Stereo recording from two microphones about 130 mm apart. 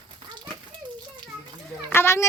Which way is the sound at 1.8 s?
20° left (ahead or behind).